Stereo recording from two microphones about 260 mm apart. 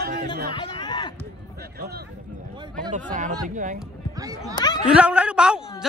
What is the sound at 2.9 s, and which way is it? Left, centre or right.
Speech, right.